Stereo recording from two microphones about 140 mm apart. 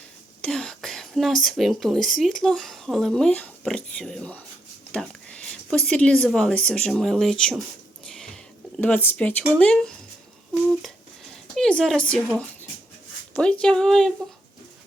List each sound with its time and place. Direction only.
0.4 s speech: 5° left (ahead or behind)
8.8 s speech: 15° left (ahead or behind)
11.5 s a woman's voice: centre (ahead or behind)